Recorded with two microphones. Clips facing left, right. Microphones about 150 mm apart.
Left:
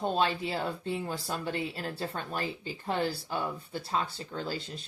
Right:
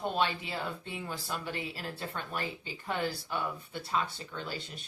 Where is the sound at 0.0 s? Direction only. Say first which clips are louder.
Left 3 dB; 35° left (ahead or behind).